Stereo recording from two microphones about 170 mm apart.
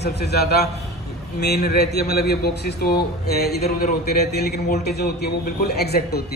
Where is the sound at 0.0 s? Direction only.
70° left (ahead or behind).